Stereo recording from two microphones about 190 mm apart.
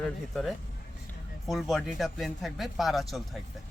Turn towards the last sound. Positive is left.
turn(degrees=0)  # may be behind; listen again after turning